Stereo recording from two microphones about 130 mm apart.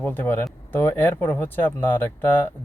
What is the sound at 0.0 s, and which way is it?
Speech, 15° left (ahead or behind).